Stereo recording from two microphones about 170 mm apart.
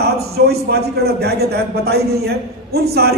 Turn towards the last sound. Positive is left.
turn(degrees=-70)  # may be behind; listen again after turning